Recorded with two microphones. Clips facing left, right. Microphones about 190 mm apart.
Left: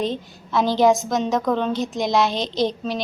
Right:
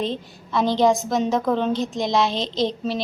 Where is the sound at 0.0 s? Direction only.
Centre (ahead or behind).